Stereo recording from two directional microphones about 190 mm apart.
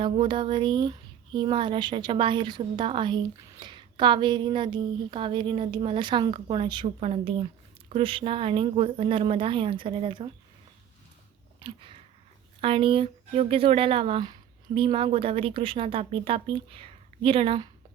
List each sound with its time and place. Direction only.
0.0 s speech: 25° right (ahead or behind)
11.6 s a sound: 25° right (ahead or behind)
12.6 s speech: 30° right (ahead or behind)